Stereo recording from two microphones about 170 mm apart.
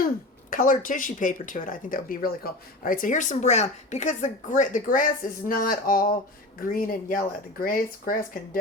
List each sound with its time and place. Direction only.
0.5 s speech: 50° left (ahead or behind)